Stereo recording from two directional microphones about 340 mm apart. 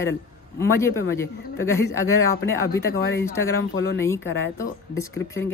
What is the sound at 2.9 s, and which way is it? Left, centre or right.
Speech, left.